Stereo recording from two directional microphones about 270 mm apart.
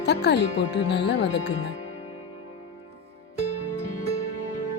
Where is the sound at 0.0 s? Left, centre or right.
Left.